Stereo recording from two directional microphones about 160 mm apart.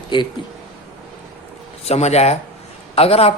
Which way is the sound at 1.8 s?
40° left (ahead or behind).